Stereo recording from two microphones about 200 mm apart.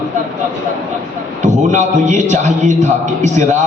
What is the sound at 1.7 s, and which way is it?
A man's voice, 35° right (ahead or behind).